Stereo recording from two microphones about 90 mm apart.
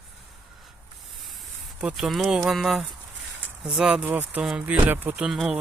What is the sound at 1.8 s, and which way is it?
Speech, 5° right (ahead or behind).